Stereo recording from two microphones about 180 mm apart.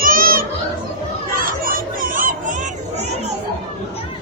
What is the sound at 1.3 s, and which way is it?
Chatter, 50° right (ahead or behind).